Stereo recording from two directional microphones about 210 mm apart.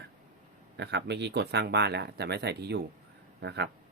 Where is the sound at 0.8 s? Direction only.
55° right (ahead or behind).